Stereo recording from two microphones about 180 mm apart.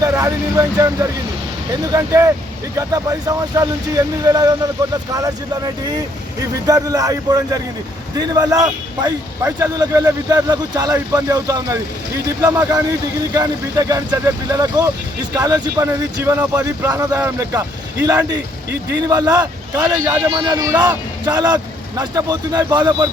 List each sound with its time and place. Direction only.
0.0 s speech: 15° right (ahead or behind)
1.9 s a man's voice: 15° right (ahead or behind)
6.7 s a man's voice: 20° right (ahead or behind)
20.3 s a man's voice: 25° right (ahead or behind)